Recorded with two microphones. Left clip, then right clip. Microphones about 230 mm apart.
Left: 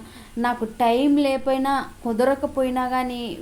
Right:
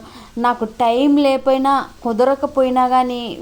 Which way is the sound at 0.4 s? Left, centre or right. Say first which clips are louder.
Right 5 dB; right.